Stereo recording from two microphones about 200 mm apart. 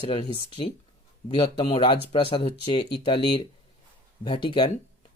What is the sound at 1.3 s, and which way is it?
Speech, 25° left (ahead or behind).